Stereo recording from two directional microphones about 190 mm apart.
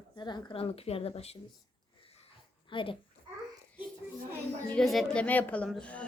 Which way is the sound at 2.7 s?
25° left (ahead or behind).